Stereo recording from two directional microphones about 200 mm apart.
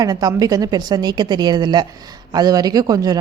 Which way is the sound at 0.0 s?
20° right (ahead or behind).